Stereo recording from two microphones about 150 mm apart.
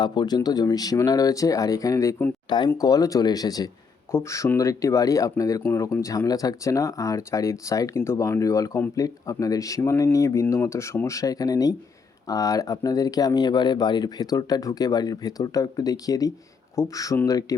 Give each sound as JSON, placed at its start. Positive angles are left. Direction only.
{"t": 0.0, "sound": "speech", "side_deg": 30}